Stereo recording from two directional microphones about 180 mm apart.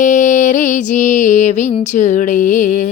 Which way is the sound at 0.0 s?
45° left (ahead or behind).